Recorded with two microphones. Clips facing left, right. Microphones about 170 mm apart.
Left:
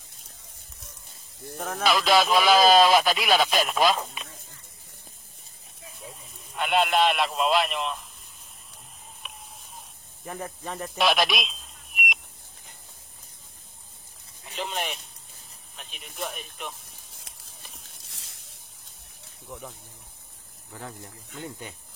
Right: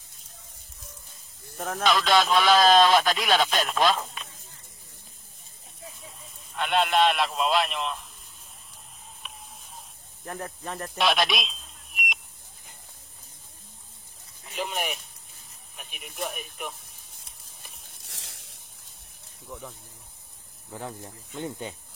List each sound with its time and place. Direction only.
1.6 s speech: 5° left (ahead or behind)
6.5 s speech: centre (ahead or behind)
9.2 s a sound: centre (ahead or behind)
10.2 s speech: centre (ahead or behind)
14.5 s speech: 10° right (ahead or behind)
18.0 s a sound: 80° right
21.4 s speech: 20° right (ahead or behind)